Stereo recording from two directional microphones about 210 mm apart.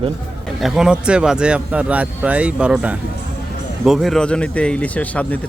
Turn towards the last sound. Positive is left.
turn(degrees=5)  # may be behind; listen again after turning